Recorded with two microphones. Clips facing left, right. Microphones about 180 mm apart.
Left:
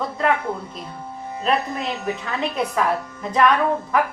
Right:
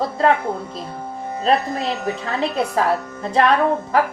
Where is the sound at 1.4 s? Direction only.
35° right (ahead or behind).